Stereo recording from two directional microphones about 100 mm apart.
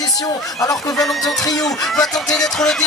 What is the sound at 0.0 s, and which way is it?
Speech, 40° left (ahead or behind).